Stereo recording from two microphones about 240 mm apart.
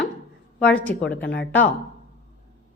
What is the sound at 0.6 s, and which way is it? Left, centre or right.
Speech, centre.